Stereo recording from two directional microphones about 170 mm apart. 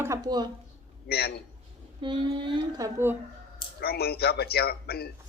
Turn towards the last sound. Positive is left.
turn(degrees=65)  # may be behind; listen again after turning